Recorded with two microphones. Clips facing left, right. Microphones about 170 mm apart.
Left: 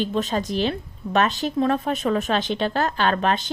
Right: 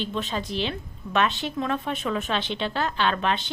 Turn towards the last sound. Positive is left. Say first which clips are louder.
# left 3 dB
turn(degrees=40)  # may be behind; listen again after turning